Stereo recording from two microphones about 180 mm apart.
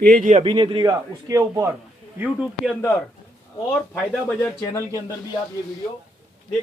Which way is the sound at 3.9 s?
5° left (ahead or behind).